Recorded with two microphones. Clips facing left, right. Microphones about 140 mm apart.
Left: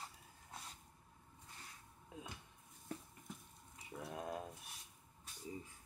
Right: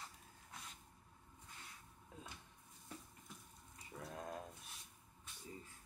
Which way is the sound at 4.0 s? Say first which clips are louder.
Left 3 dB; 15° left (ahead or behind).